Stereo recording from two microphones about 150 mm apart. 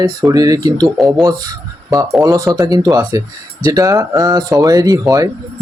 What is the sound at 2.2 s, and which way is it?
Speech, 20° right (ahead or behind).